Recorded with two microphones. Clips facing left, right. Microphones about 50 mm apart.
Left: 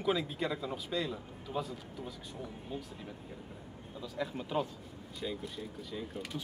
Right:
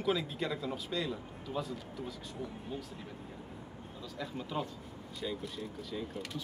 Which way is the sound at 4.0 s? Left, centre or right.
Centre.